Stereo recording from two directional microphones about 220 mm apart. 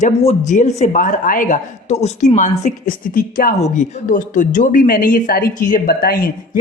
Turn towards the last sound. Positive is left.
turn(degrees=40)  # may be behind; listen again after turning